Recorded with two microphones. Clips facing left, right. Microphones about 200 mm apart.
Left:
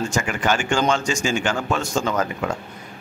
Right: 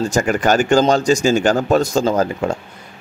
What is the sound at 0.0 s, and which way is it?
Speech, 40° right (ahead or behind).